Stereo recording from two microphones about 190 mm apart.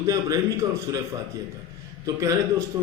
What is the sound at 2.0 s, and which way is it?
Speech, 20° right (ahead or behind).